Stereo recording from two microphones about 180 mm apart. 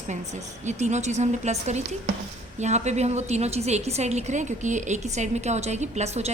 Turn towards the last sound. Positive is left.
turn(degrees=-40)  # may be behind; listen again after turning